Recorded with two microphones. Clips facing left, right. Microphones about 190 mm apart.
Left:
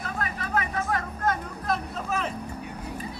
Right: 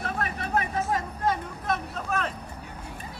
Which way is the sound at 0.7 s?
15° right (ahead or behind).